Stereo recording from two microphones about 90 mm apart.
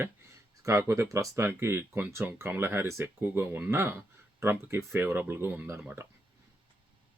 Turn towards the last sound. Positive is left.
turn(degrees=-25)  # may be behind; listen again after turning